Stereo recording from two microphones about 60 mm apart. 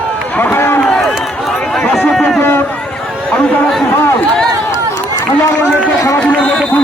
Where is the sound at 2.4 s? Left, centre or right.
Left.